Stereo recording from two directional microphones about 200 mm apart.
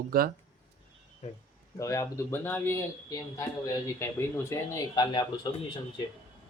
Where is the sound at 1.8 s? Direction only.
15° left (ahead or behind).